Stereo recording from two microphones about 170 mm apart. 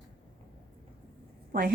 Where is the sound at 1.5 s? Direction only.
55° right (ahead or behind).